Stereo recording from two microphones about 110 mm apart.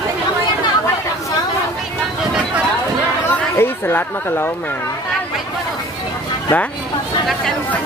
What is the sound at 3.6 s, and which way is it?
Speech, 20° left (ahead or behind).